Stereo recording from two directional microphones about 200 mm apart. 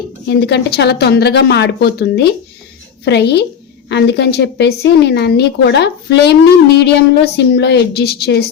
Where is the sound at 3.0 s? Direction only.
55° left (ahead or behind).